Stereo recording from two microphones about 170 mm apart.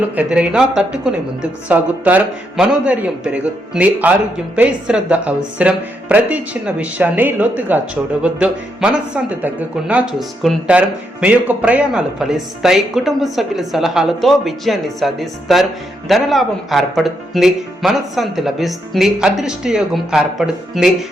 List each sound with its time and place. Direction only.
0.2 s a woman's voice: 5° right (ahead or behind)